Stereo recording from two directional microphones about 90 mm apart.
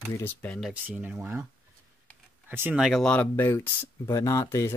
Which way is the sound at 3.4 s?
25° left (ahead or behind).